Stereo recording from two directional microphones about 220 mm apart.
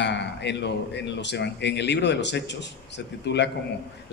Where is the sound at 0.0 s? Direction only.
50° left (ahead or behind).